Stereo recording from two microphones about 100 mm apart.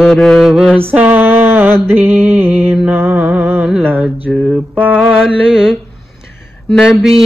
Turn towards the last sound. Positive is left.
turn(degrees=-5)  # may be behind; listen again after turning